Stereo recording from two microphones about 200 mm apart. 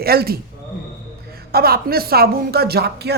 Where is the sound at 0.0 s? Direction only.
50° right (ahead or behind).